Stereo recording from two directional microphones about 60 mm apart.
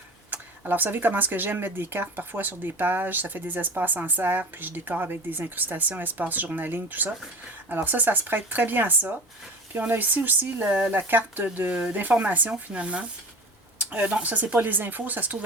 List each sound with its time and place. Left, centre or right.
0.3 s speech: right